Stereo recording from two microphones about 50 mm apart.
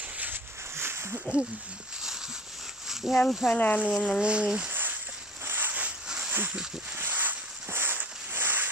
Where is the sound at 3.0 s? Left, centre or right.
Centre.